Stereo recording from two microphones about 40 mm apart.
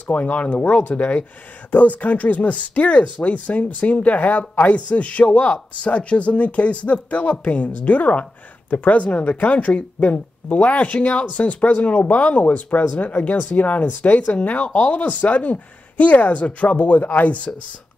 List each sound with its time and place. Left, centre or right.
0.1 s speech: left